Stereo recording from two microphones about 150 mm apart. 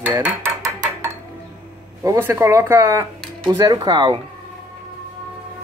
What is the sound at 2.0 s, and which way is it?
Speech, 15° right (ahead or behind).